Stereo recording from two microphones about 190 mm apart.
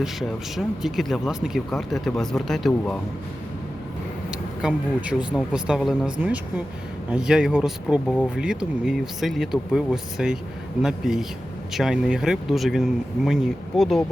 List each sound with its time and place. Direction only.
0.0 s speech: centre (ahead or behind)
4.3 s speech: 5° right (ahead or behind)